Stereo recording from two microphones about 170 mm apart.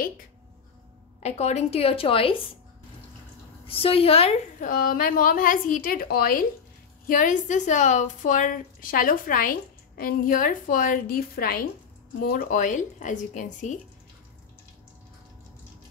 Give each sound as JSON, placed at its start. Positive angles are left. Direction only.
{"t": 1.2, "sound": "a woman's voice", "side_deg": 40}
{"t": 3.6, "sound": "a woman's voice", "side_deg": 35}